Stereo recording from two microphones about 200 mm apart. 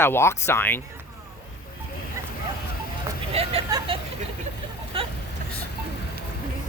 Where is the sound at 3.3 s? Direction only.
30° right (ahead or behind).